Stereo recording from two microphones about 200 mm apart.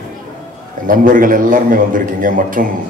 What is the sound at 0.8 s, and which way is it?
A man's voice, 40° right (ahead or behind).